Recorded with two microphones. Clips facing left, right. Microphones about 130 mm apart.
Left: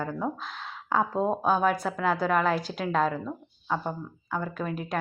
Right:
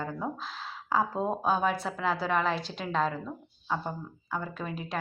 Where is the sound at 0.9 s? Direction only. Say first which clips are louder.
Left 3 dB; centre (ahead or behind).